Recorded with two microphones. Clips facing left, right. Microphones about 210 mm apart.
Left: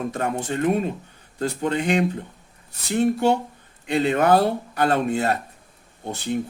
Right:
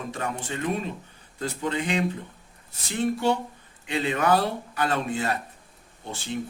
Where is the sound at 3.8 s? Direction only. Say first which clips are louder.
Left 5 dB; 50° left (ahead or behind).